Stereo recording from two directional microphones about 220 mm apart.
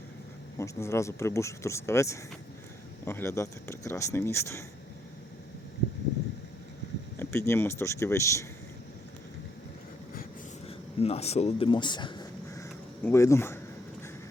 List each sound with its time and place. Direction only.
0.6 s speech: 10° left (ahead or behind)
7.2 s speech: 10° left (ahead or behind)
10.7 s a sound: 30° left (ahead or behind); by 13.6 s 10° left (ahead or behind)